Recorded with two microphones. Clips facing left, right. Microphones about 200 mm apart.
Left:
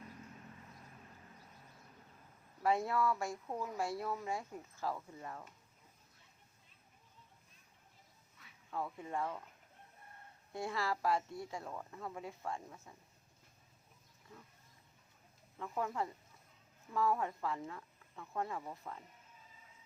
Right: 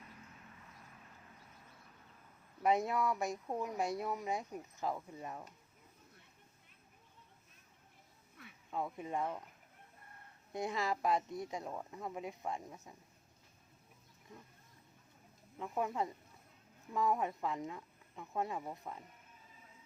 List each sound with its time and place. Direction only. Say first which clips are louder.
2.6 s speech: right 1 dB; 20° right (ahead or behind)
8.4 s a sound: right 10 dB; 60° right (ahead or behind)
8.7 s speech: right 2 dB; 20° right (ahead or behind)
10.5 s speech: right 1 dB; 20° right (ahead or behind)
15.5 s speech: right 2 dB; 15° right (ahead or behind)